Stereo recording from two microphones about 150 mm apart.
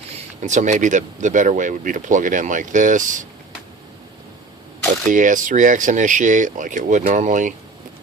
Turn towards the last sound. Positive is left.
turn(degrees=-55)  # may be behind; listen again after turning